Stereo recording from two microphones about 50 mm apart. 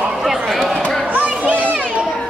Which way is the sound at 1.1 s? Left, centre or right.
Right.